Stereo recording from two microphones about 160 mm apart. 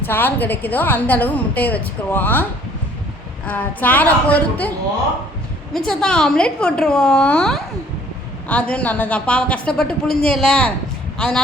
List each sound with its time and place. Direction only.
0.0 s a woman's voice: 10° left (ahead or behind)
5.7 s a woman's voice: 5° left (ahead or behind)